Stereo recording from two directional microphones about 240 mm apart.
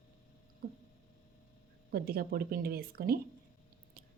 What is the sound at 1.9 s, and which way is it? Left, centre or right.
A woman's voice, right.